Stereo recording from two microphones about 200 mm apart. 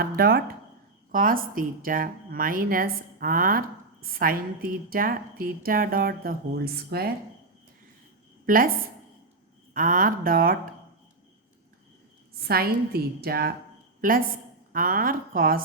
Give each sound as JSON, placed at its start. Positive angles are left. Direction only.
{"t": 0.0, "sound": "a woman's voice", "side_deg": -50}
{"t": 8.4, "sound": "a woman's voice", "side_deg": -45}
{"t": 9.7, "sound": "a woman's voice", "side_deg": -45}
{"t": 12.3, "sound": "a woman's voice", "side_deg": -50}